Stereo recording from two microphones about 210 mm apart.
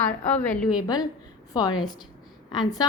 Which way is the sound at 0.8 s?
20° left (ahead or behind).